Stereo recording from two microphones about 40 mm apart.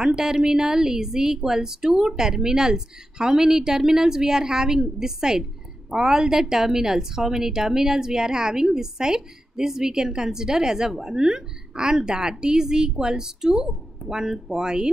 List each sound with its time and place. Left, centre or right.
0.0 s a woman's voice: centre